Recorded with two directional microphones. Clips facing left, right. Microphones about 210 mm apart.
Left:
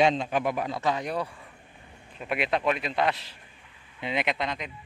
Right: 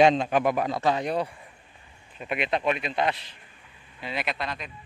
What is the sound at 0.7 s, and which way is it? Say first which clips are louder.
Speech: right 3 dB; 30° right (ahead or behind).